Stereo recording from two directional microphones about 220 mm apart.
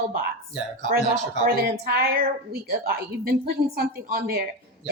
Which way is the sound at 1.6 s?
45° right (ahead or behind).